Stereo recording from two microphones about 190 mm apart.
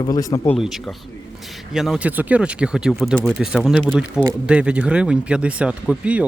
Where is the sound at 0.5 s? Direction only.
Centre (ahead or behind).